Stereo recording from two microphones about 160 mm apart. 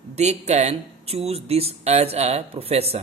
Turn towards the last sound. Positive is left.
turn(degrees=-40)  # may be behind; listen again after turning